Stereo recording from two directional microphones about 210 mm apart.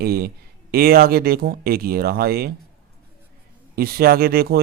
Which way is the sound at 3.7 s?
45° right (ahead or behind).